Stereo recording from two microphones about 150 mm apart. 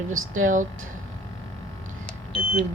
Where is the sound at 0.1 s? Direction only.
60° right (ahead or behind).